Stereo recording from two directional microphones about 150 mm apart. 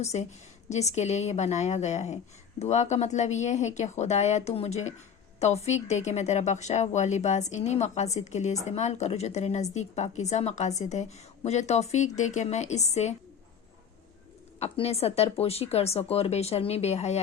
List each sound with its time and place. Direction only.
0.0 s speech: 50° left (ahead or behind)
14.6 s speech: 45° left (ahead or behind)